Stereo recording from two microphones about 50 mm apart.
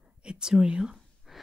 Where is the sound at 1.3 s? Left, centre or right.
Centre.